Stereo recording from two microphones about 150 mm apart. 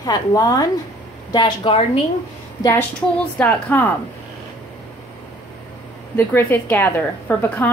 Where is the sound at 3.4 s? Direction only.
15° left (ahead or behind).